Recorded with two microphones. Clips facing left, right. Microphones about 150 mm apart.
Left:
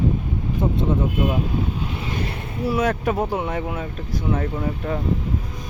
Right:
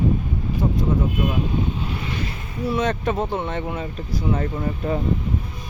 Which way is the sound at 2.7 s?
10° left (ahead or behind).